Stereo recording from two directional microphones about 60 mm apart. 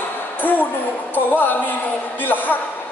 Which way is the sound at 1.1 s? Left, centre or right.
Left.